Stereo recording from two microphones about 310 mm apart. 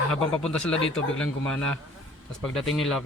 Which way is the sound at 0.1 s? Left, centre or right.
Centre.